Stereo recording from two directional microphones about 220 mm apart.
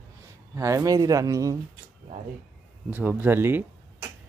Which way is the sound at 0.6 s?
15° right (ahead or behind).